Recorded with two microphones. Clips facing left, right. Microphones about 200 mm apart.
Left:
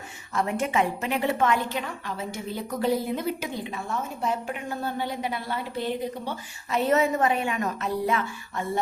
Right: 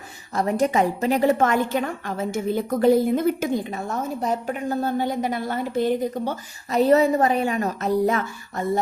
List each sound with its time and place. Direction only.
0.3 s a woman's voice: 35° right (ahead or behind)